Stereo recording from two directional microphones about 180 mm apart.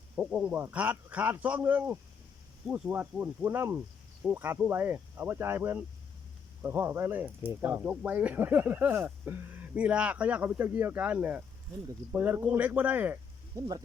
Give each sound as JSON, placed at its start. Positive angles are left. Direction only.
{"t": 0.2, "sound": "speech", "side_deg": -10}
{"t": 13.6, "sound": "speech", "side_deg": -20}